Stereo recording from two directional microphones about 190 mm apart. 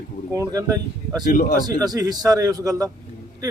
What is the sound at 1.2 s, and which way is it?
Speech, 45° left (ahead or behind).